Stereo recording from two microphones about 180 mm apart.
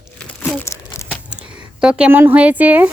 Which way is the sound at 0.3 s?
10° left (ahead or behind).